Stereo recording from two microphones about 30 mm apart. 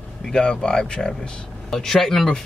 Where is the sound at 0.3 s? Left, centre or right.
Left.